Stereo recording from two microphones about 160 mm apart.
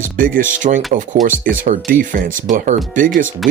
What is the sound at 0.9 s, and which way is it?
Speech, 55° right (ahead or behind).